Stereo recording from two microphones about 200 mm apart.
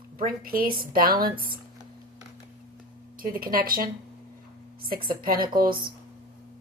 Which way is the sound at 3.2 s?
45° right (ahead or behind).